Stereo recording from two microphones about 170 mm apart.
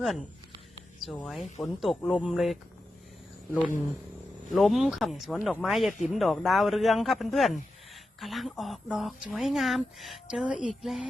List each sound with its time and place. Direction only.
0.0 s speech: centre (ahead or behind)
4.5 s speech: centre (ahead or behind)